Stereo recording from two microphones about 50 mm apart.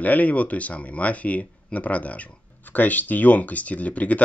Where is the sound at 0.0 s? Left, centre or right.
Left.